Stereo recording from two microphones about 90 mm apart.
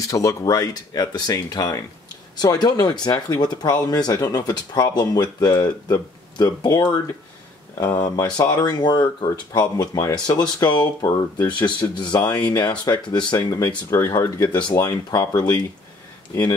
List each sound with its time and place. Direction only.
0.0 s speech: 40° left (ahead or behind)
8.4 s speech: 50° left (ahead or behind)
9.6 s speech: 40° left (ahead or behind)
13.8 s speech: 35° left (ahead or behind)
14.4 s speech: 55° left (ahead or behind)
16.3 s speech: 35° left (ahead or behind)